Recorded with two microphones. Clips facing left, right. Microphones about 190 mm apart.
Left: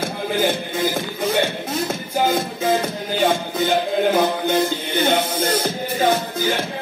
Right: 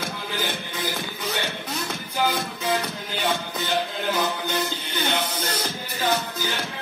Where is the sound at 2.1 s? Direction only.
50° left (ahead or behind).